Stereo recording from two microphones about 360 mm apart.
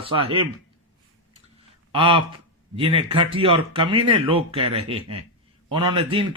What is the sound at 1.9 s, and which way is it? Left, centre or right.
Speech, centre.